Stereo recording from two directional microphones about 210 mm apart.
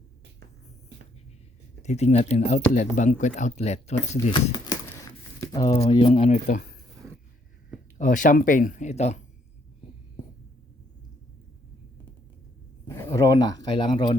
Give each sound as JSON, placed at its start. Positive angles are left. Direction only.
{"t": 1.8, "sound": "speech", "side_deg": 30}
{"t": 4.3, "sound": "speech", "side_deg": 20}
{"t": 7.9, "sound": "speech", "side_deg": 40}
{"t": 12.9, "sound": "speech", "side_deg": 15}